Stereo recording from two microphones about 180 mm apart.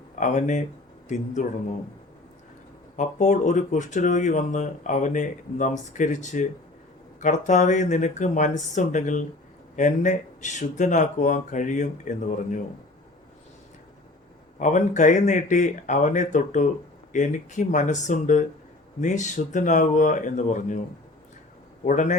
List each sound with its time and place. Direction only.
0.2 s speech: 45° left (ahead or behind)
2.9 s speech: 45° left (ahead or behind)
14.6 s speech: 45° left (ahead or behind)
21.8 s speech: 45° left (ahead or behind)